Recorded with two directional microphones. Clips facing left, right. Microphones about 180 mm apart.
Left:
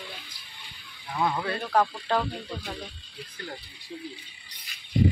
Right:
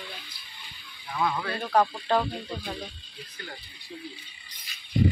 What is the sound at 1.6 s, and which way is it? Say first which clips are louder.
Speech: right 3 dB; 10° right (ahead or behind).